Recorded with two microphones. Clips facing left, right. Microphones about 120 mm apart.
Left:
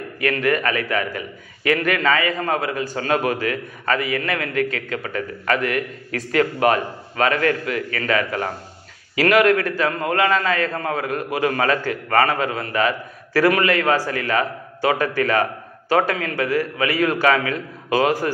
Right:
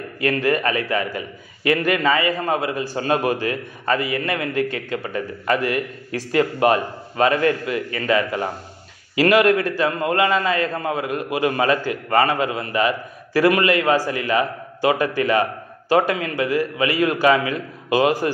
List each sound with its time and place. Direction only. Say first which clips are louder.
0.2 s a man's voice: right 1 dB; 30° right (ahead or behind); by 2.6 s 15° right (ahead or behind)
3.0 s a man's voice: right 1 dB; 30° right (ahead or behind)